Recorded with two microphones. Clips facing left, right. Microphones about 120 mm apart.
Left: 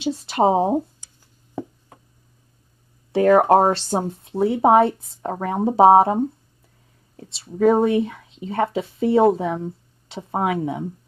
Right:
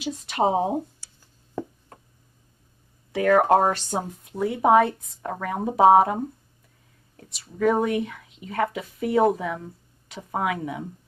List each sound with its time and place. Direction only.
0.0 s speech: 30° left (ahead or behind)
0.7 s a sound: 10° left (ahead or behind)
3.1 s speech: 30° left (ahead or behind)